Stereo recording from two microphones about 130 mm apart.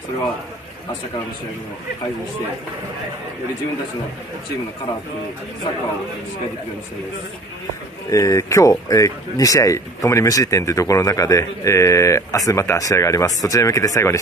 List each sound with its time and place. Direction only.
8.1 s speech: 25° left (ahead or behind)